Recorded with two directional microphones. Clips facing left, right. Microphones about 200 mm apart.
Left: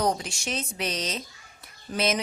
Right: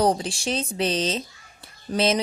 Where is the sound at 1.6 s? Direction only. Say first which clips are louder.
Right 5 dB; 30° right (ahead or behind).